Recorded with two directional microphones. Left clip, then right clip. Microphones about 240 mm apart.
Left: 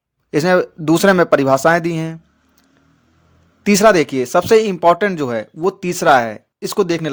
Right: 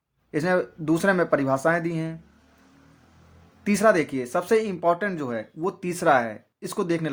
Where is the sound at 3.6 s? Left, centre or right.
Left.